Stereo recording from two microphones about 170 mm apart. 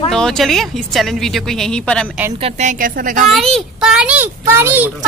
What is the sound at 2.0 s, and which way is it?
Speech, 10° right (ahead or behind).